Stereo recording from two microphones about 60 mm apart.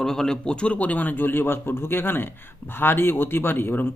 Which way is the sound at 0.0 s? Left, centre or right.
Centre.